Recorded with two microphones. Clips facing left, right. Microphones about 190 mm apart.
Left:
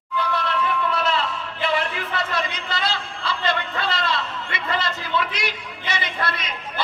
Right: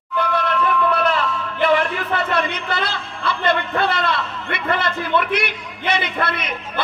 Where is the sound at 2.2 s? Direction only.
60° right (ahead or behind).